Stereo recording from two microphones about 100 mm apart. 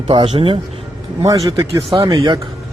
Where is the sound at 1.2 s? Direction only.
35° right (ahead or behind).